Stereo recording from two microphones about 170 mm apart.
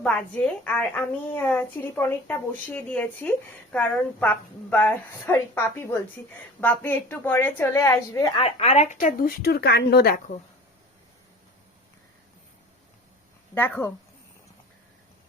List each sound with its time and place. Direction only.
0.0 s a woman's voice: 5° left (ahead or behind)
8.4 s speech: 35° left (ahead or behind); by 10.3 s 60° left (ahead or behind)
13.5 s a woman's voice: 15° left (ahead or behind)